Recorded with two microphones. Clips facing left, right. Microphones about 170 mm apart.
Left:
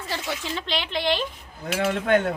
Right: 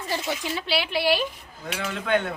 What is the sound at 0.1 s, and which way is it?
Speech, 15° right (ahead or behind).